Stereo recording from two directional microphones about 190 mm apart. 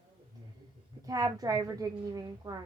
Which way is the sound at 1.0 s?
20° right (ahead or behind).